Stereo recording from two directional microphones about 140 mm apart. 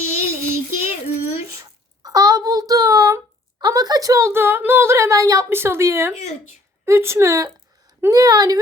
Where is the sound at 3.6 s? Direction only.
30° right (ahead or behind).